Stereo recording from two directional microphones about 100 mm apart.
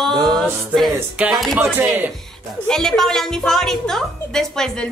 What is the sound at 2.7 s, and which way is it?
A woman's voice, 5° left (ahead or behind).